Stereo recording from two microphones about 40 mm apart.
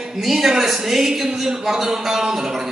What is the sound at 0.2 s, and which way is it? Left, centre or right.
A man's voice, centre.